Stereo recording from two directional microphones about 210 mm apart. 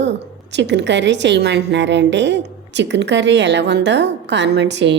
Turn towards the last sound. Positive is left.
turn(degrees=-55)  # may be behind; listen again after turning